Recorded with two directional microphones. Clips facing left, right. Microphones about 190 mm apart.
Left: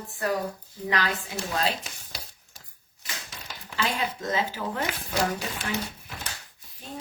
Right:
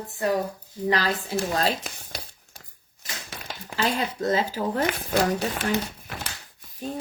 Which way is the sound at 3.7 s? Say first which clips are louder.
Right 3 dB; 40° right (ahead or behind).